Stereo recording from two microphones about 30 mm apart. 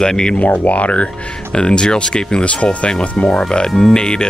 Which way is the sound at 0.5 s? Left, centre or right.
Left.